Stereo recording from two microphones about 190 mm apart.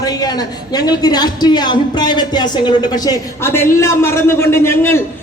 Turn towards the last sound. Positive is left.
turn(degrees=10)  # may be behind; listen again after turning